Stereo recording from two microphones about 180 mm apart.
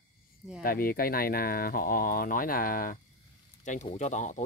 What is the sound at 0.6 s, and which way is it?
Speech, 55° left (ahead or behind).